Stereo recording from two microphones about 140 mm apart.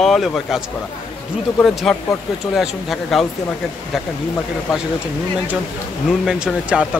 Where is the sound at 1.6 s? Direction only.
Centre (ahead or behind).